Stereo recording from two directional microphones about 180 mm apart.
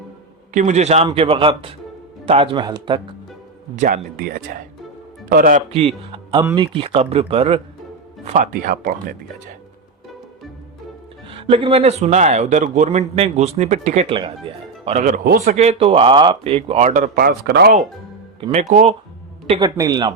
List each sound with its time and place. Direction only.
0.5 s speech: 40° right (ahead or behind); by 3.0 s 25° right (ahead or behind)
3.8 s speech: 45° right (ahead or behind)
5.7 s speech: 30° right (ahead or behind)
8.2 s speech: 45° right (ahead or behind)
11.3 s speech: 30° right (ahead or behind)
15.0 s a man's voice: 50° right (ahead or behind)
15.5 s speech: 35° right (ahead or behind); by 17.7 s 60° right (ahead or behind)
18.7 s speech: 40° right (ahead or behind)
19.5 s speech: 25° right (ahead or behind)